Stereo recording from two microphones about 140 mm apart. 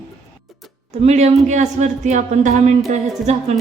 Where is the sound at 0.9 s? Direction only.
50° right (ahead or behind).